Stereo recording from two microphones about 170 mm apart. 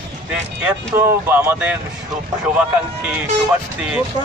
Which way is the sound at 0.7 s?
15° right (ahead or behind).